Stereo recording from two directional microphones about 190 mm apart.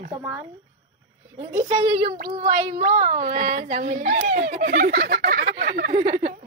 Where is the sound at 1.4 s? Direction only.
35° right (ahead or behind); by 5.9 s 55° right (ahead or behind).